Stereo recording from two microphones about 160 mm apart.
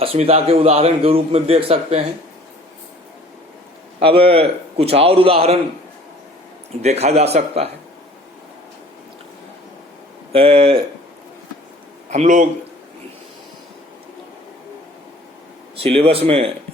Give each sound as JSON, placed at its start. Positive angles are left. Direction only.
{"t": 0.0, "sound": "a man's voice", "side_deg": -40}
{"t": 4.0, "sound": "a man's voice", "side_deg": -35}
{"t": 6.8, "sound": "a man's voice", "side_deg": -40}
{"t": 10.3, "sound": "a man's voice", "side_deg": -35}
{"t": 12.1, "sound": "speech", "side_deg": -50}
{"t": 15.7, "sound": "a man's voice", "side_deg": -35}